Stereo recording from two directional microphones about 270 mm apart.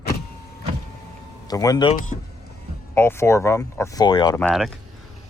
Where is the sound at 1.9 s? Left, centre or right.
Left.